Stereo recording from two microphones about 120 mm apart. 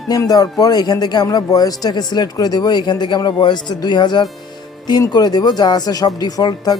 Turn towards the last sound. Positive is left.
turn(degrees=35)  # may be behind; listen again after turning